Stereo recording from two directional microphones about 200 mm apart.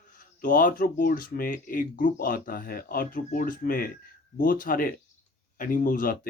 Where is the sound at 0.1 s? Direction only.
40° left (ahead or behind).